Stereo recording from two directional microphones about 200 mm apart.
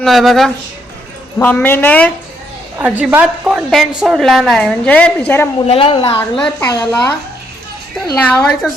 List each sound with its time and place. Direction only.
0.0 s a woman's voice: centre (ahead or behind)
2.7 s a woman's voice: 10° right (ahead or behind); by 5.5 s 10° left (ahead or behind)
5.6 s a woman's voice: 30° left (ahead or behind)
6.1 s speech: 10° left (ahead or behind)
8.1 s a woman's voice: 5° left (ahead or behind)